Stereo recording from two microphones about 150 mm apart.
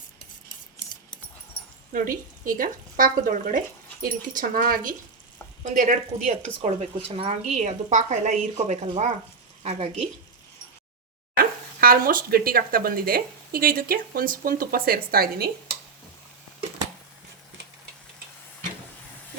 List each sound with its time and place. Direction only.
1.9 s speech: 65° right (ahead or behind)
5.6 s speech: 55° right (ahead or behind)
11.3 s speech: 80° right